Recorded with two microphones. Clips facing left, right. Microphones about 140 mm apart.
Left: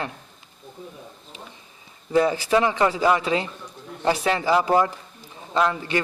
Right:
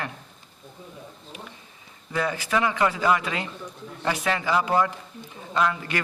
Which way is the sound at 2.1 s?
30° left (ahead or behind).